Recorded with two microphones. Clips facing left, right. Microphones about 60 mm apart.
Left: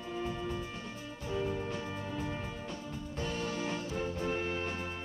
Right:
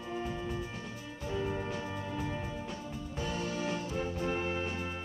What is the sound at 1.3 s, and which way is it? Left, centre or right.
Music, right.